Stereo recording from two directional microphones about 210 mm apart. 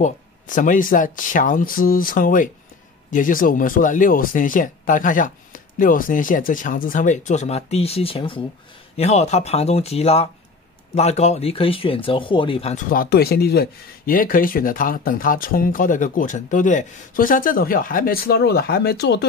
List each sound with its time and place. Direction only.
0.0 s speech: 40° left (ahead or behind)